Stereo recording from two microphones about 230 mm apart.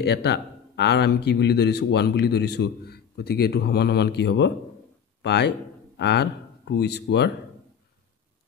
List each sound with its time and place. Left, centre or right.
0.0 s a man's voice: left